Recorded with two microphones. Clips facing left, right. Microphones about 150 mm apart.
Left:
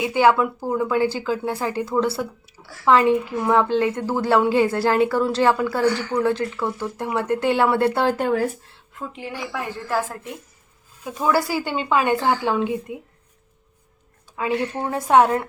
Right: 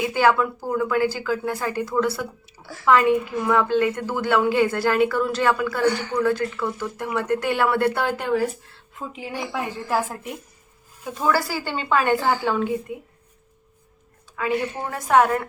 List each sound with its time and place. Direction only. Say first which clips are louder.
0.0 s a woman's voice: left 2 dB; 20° left (ahead or behind)
8.2 s speech: left 1 dB; 50° left (ahead or behind)
9.3 s a woman's voice: right 3 dB; 20° right (ahead or behind)
11.1 s a woman's voice: left 2 dB; 15° left (ahead or behind)
14.4 s a woman's voice: left 1 dB; 25° left (ahead or behind)